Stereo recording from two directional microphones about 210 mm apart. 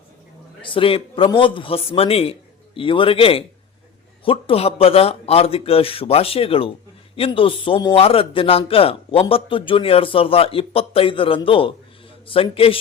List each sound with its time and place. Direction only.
0.6 s a man's voice: 25° left (ahead or behind)